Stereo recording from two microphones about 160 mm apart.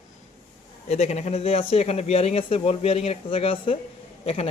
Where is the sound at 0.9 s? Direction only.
45° left (ahead or behind).